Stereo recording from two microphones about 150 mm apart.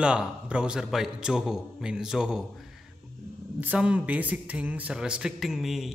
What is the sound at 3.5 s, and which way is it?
Speech, 10° right (ahead or behind).